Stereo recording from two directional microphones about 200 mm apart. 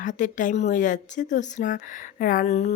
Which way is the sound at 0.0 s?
40° left (ahead or behind).